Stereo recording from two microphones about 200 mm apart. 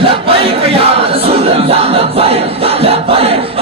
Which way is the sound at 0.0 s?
25° right (ahead or behind).